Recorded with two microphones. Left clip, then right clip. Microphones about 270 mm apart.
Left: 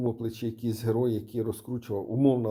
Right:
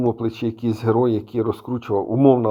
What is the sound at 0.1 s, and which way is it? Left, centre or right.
Speech, centre.